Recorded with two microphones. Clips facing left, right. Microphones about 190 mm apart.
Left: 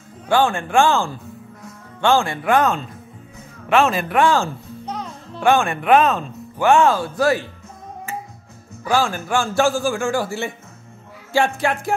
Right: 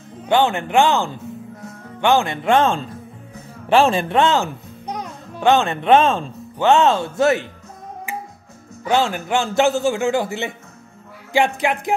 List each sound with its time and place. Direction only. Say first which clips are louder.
0.3 s a man's voice: right 1 dB; 20° right (ahead or behind)
8.8 s a man's voice: right 1 dB; 25° right (ahead or behind)